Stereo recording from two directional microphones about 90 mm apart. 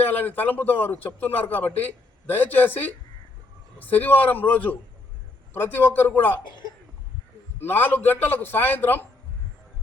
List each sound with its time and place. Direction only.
0.1 s a man's voice: 20° left (ahead or behind)
7.6 s a man's voice: 20° left (ahead or behind)